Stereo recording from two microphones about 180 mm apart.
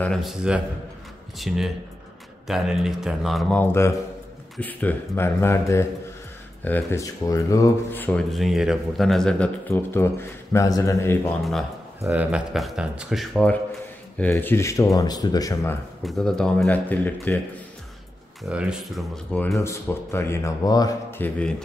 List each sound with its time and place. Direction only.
0.0 s speech: centre (ahead or behind)
9.7 s speech: 15° left (ahead or behind)
12.0 s speech: 10° right (ahead or behind); by 15.8 s 15° left (ahead or behind)
16.0 s speech: centre (ahead or behind)
18.4 s speech: 5° right (ahead or behind)